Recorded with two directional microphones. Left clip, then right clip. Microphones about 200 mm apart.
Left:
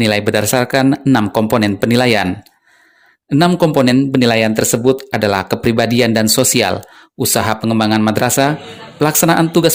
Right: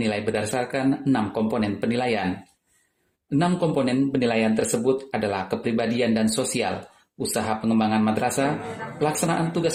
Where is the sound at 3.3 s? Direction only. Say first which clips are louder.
Left 11 dB; 55° left (ahead or behind).